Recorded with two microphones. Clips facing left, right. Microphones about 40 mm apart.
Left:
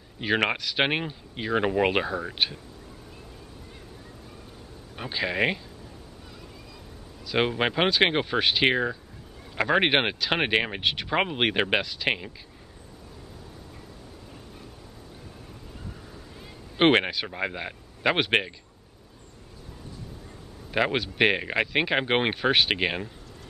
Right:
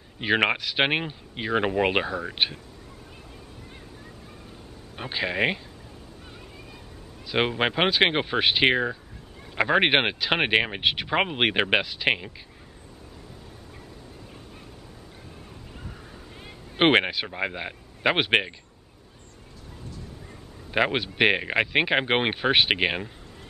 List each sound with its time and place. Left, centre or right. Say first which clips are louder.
0.2 s speech: right 2 dB; centre
4.9 s speech: even; centre
7.2 s speech: right 1 dB; centre
16.7 s speech: right 1 dB; centre
20.7 s speech: right 1 dB; centre